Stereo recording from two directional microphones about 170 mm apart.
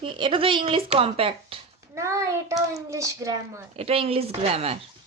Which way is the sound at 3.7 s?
35° right (ahead or behind).